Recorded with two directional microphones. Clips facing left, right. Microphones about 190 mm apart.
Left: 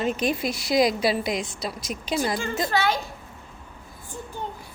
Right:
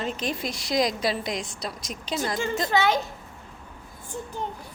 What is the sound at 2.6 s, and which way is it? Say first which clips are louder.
Speech: right 2 dB; 20° right (ahead or behind).